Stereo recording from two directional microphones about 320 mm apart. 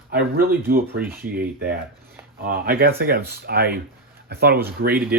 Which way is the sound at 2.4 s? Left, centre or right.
Right.